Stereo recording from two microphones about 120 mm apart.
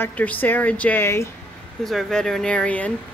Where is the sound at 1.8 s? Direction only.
5° left (ahead or behind).